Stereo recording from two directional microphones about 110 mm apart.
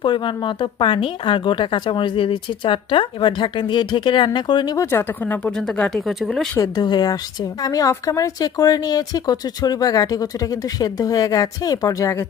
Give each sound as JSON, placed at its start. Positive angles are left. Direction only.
{"t": 0.0, "sound": "a woman's voice", "side_deg": 45}
{"t": 4.9, "sound": "speech", "side_deg": 20}
{"t": 6.6, "sound": "speech", "side_deg": 40}